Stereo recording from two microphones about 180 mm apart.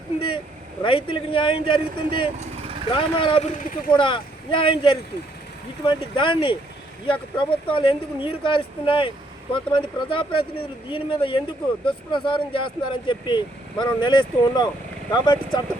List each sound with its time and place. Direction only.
0.2 s a man's voice: 30° left (ahead or behind)